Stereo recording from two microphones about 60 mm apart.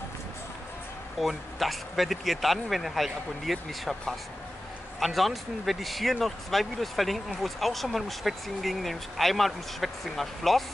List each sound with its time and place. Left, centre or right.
1.2 s speech: centre
5.0 s speech: centre